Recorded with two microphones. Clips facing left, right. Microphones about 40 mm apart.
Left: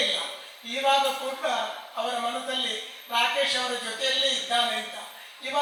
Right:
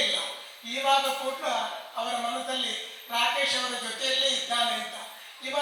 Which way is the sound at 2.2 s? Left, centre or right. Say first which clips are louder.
Left 1 dB; centre.